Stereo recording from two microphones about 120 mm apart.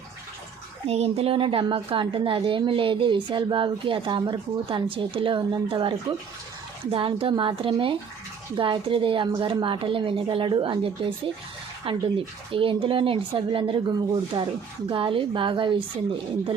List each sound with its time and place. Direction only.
0.9 s a woman's voice: 60° right (ahead or behind)
14.3 s speech: 35° right (ahead or behind)
14.8 s a woman's voice: 45° right (ahead or behind)